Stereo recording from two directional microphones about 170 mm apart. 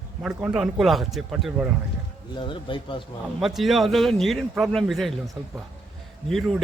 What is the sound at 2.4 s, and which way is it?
Speech, 30° left (ahead or behind).